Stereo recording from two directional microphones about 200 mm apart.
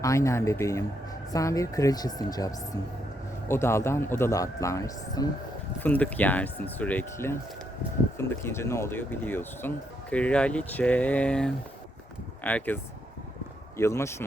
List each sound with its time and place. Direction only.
0.0 s speech: 15° left (ahead or behind)
3.5 s speech: 15° left (ahead or behind)